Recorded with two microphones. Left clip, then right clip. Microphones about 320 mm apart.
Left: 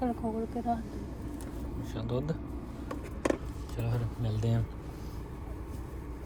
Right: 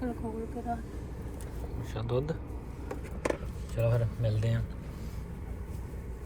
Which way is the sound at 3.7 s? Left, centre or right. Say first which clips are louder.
Right 8 dB; centre.